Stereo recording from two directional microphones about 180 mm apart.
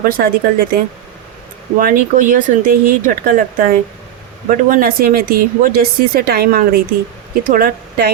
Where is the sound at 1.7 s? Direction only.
50° right (ahead or behind).